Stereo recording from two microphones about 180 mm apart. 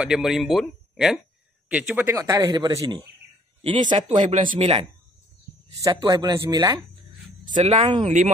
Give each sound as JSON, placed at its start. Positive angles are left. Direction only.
{"t": 0.0, "sound": "speech", "side_deg": -5}
{"t": 4.2, "sound": "speech", "side_deg": -45}
{"t": 5.8, "sound": "speech", "side_deg": -20}
{"t": 7.5, "sound": "speech", "side_deg": -35}